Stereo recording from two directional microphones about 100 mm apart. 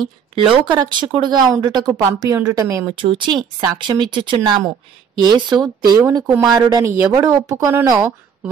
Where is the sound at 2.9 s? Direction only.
55° right (ahead or behind).